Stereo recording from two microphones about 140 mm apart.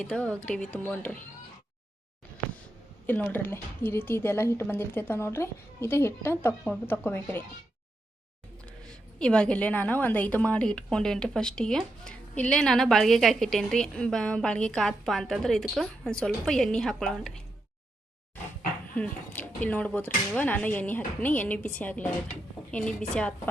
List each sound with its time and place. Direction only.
0.0 s a woman's voice: 10° left (ahead or behind)
3.1 s a woman's voice: 10° left (ahead or behind)
8.9 s a woman's voice: 5° left (ahead or behind)
18.9 s a woman's voice: 10° left (ahead or behind)